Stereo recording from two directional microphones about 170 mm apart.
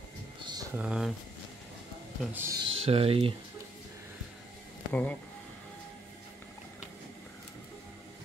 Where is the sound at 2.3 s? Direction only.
15° right (ahead or behind).